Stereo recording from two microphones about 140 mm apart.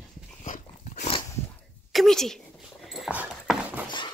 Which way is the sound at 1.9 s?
Centre (ahead or behind).